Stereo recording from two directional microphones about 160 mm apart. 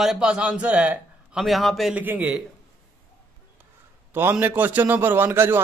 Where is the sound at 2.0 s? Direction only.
10° right (ahead or behind).